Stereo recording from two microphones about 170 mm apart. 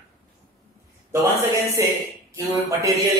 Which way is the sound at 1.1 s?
20° right (ahead or behind).